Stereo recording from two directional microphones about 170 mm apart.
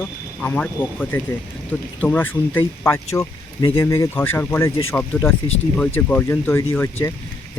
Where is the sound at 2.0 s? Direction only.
10° left (ahead or behind).